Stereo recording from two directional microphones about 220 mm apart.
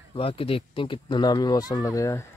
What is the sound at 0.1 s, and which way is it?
Speech, 25° left (ahead or behind).